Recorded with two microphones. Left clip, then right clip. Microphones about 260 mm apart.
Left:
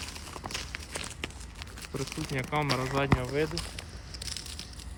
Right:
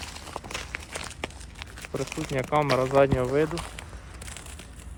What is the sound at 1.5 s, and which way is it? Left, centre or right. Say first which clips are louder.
Crumpling: right 5 dB; centre.